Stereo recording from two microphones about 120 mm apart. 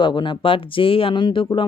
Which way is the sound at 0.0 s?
40° left (ahead or behind).